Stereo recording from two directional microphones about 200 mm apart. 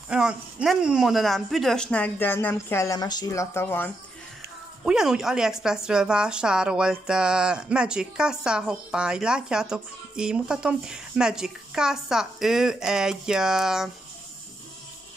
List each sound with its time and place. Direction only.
0.1 s speech: 5° right (ahead or behind); by 3.9 s 10° left (ahead or behind)
4.8 s speech: 5° right (ahead or behind)